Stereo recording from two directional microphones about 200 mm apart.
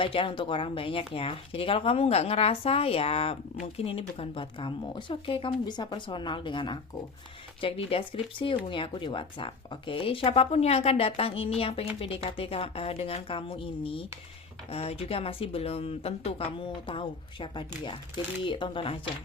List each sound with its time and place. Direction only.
0.0 s speech: 25° left (ahead or behind)